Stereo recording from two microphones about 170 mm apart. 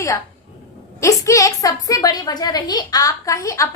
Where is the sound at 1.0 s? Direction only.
20° left (ahead or behind).